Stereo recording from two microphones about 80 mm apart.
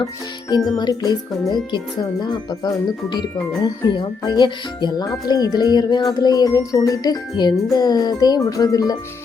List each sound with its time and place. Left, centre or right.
0.8 s speech: left
3.6 s speech: left
5.0 s speech: left
6.1 s music: left